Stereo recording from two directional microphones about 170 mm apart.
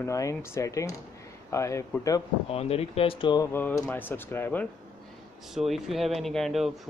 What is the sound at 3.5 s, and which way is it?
Speech, 10° left (ahead or behind).